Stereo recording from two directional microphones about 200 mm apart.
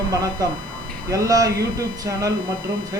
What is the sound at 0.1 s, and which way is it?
Speech, 15° right (ahead or behind).